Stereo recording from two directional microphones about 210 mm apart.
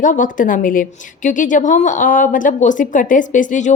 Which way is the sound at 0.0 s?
40° left (ahead or behind).